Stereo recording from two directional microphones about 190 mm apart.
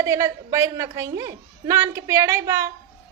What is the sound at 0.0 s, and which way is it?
A woman's voice, 15° right (ahead or behind).